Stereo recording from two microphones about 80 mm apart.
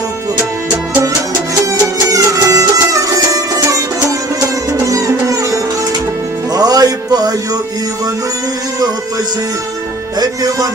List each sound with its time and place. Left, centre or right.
1.7 s music: right
4.9 s music: right
10.2 s music: right